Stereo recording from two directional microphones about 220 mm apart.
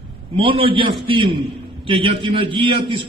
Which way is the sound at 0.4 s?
25° right (ahead or behind).